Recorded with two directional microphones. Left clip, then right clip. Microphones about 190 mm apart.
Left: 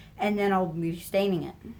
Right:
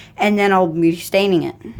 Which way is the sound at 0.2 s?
45° right (ahead or behind).